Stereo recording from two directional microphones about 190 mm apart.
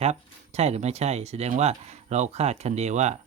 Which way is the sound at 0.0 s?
35° right (ahead or behind).